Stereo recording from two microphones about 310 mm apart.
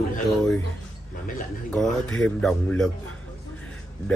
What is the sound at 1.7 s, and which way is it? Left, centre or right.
Speech, centre.